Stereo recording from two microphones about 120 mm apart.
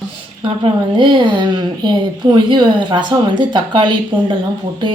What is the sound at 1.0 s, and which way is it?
Speech, 40° right (ahead or behind).